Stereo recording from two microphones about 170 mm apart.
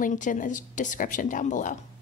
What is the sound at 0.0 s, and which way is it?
Speech, 50° left (ahead or behind).